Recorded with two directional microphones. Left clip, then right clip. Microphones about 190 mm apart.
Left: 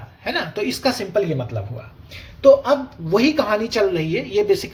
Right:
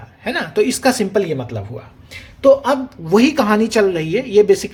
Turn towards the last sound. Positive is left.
turn(degrees=-30)  # may be behind; listen again after turning